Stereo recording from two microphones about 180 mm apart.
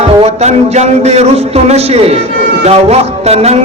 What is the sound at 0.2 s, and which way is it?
A man's voice, 40° right (ahead or behind).